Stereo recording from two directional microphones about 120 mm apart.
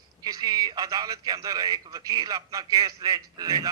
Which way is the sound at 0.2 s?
30° right (ahead or behind).